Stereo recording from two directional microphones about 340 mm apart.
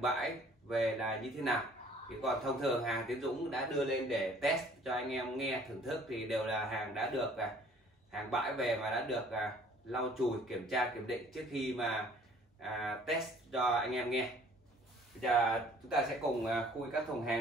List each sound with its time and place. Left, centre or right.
0.0 s a man's voice: centre